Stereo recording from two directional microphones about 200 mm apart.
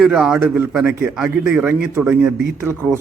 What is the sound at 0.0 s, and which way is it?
A man's voice, 5° right (ahead or behind).